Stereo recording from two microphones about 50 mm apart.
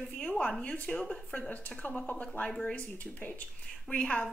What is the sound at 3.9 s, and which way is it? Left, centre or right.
Speech, left.